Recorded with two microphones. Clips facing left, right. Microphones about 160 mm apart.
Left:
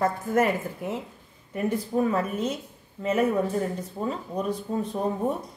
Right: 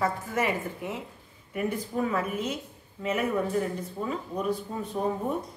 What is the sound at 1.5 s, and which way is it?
A woman's voice, 30° left (ahead or behind).